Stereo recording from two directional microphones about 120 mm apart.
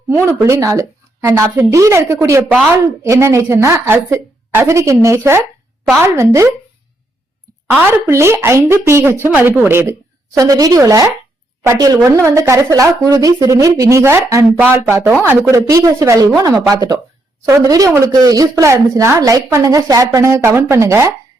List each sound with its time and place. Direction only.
0.4 s speech: 25° right (ahead or behind)
7.9 s speech: 20° right (ahead or behind)